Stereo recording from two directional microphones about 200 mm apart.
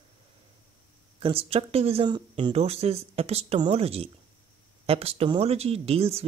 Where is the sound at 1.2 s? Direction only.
30° right (ahead or behind).